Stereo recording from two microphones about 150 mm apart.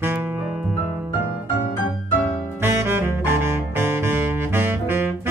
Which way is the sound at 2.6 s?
15° right (ahead or behind).